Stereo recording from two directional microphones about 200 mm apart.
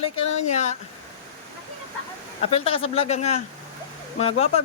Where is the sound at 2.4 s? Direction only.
30° left (ahead or behind).